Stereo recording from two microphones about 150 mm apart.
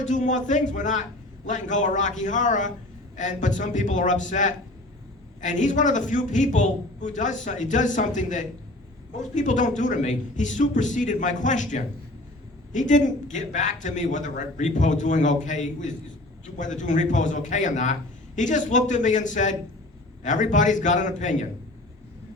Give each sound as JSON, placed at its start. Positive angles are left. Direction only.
{"t": 0.0, "sound": "a man's voice", "side_deg": 55}